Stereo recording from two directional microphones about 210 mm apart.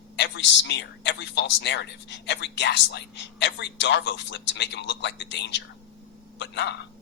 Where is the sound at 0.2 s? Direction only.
55° left (ahead or behind).